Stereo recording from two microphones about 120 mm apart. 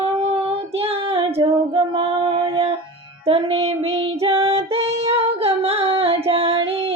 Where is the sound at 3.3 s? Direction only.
55° right (ahead or behind).